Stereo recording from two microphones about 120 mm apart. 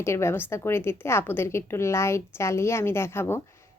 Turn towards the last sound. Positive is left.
turn(degrees=20)  # may be behind; listen again after turning